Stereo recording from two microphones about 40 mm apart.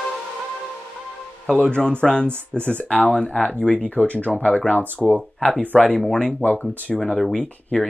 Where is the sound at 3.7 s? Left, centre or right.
Left.